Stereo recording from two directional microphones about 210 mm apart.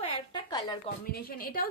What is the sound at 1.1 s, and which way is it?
Speech, 45° left (ahead or behind).